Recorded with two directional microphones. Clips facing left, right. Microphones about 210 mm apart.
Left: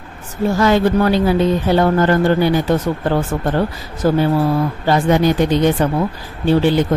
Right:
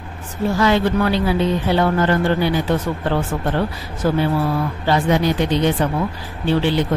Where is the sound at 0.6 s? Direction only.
45° left (ahead or behind).